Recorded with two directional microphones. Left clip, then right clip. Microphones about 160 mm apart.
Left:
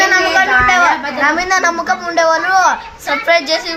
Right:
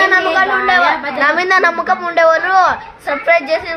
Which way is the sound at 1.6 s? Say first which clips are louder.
Right 1 dB; 20° right (ahead or behind).